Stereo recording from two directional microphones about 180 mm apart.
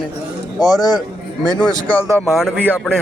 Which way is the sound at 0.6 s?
20° left (ahead or behind).